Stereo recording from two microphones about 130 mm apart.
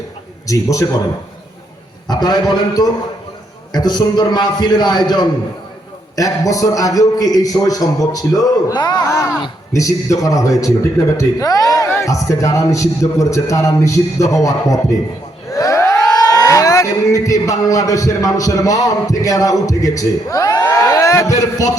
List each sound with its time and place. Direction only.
0.4 s a man's voice: 25° left (ahead or behind)
2.0 s a man's voice: 30° left (ahead or behind)
15.5 s a sound: 25° left (ahead or behind)
16.2 s a man's voice: 30° left (ahead or behind)